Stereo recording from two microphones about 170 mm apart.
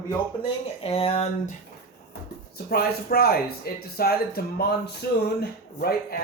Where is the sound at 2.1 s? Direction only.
65° left (ahead or behind).